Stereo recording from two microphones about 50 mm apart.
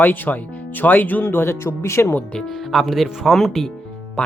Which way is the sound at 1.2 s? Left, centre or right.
Left.